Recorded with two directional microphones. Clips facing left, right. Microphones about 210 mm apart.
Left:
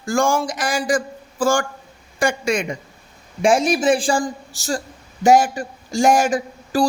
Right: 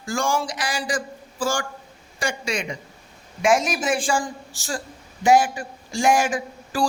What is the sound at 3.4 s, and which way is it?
A woman's voice, 30° left (ahead or behind).